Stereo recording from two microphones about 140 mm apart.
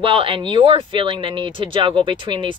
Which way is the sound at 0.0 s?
40° right (ahead or behind).